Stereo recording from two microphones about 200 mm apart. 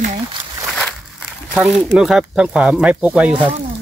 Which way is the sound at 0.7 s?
Centre (ahead or behind).